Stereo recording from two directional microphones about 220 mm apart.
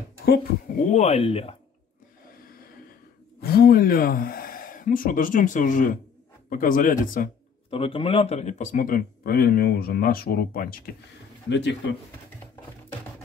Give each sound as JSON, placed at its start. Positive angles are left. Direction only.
{"t": 0.2, "sound": "speech", "side_deg": 45}
{"t": 3.3, "sound": "speech", "side_deg": 45}
{"t": 7.7, "sound": "speech", "side_deg": 25}
{"t": 11.4, "sound": "speech", "side_deg": 50}